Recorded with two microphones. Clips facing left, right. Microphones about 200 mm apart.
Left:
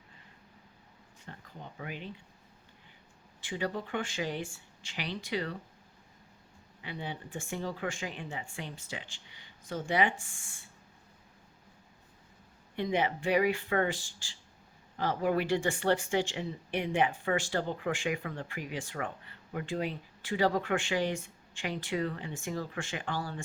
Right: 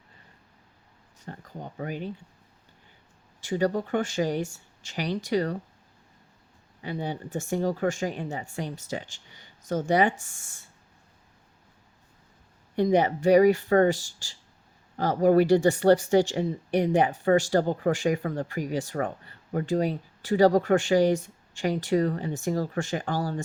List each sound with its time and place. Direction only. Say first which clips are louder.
1.2 s speech: right 8 dB; 45° right (ahead or behind)
3.4 s speech: right 9 dB; 40° right (ahead or behind)
6.8 s speech: right 8 dB; 40° right (ahead or behind)
12.7 s speech: right 8 dB; 40° right (ahead or behind)